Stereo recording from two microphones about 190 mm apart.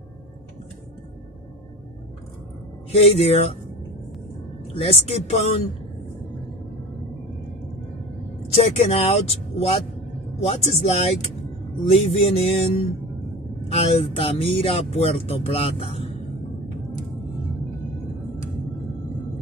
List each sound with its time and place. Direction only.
2.9 s speech: 30° left (ahead or behind)
4.7 s speech: 30° left (ahead or behind)
8.5 s speech: 30° left (ahead or behind)